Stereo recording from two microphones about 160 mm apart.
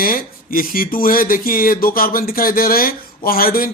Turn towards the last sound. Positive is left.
turn(degrees=65)  # may be behind; listen again after turning